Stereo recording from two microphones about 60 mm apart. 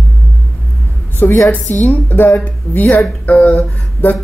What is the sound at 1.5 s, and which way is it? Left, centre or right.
Speech, left.